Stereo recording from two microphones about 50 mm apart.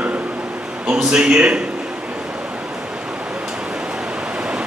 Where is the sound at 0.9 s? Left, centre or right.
Centre.